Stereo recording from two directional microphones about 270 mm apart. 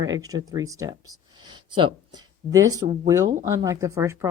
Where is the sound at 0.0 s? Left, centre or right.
Centre.